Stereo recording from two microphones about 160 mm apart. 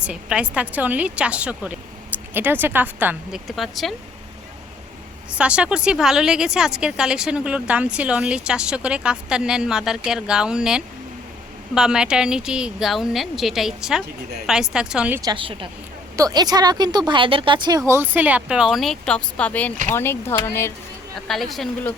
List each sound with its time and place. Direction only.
0.0 s speech: 5° right (ahead or behind)
3.4 s speech: centre (ahead or behind)
5.3 s speech: 5° right (ahead or behind)
15.2 s a woman's voice: 30° right (ahead or behind); by 20.7 s 15° left (ahead or behind)
21.2 s speech: centre (ahead or behind)